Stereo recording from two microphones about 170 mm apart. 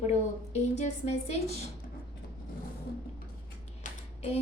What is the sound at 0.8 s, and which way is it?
Speech, 40° left (ahead or behind).